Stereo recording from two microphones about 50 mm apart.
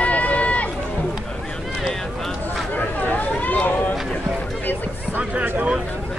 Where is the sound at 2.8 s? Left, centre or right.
Left.